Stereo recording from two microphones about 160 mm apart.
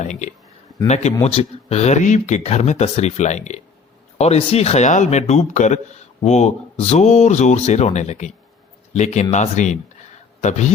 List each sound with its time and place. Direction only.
0.0 s a man's voice: 50° left (ahead or behind)